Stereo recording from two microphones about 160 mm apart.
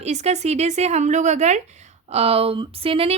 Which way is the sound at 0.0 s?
45° right (ahead or behind).